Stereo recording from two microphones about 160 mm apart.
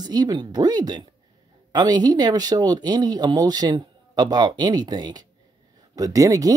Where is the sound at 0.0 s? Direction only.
25° right (ahead or behind).